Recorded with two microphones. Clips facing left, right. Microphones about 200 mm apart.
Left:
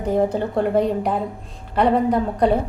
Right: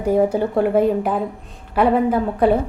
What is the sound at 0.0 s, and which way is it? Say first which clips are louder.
A woman's voice: right 3 dB; 10° right (ahead or behind).